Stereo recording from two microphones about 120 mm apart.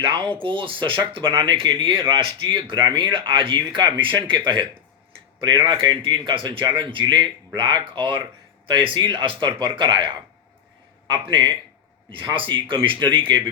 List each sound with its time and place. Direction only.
0.0 s a man's voice: 45° right (ahead or behind)